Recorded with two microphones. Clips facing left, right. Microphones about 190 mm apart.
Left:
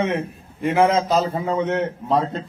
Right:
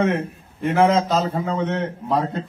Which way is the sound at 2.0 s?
25° left (ahead or behind).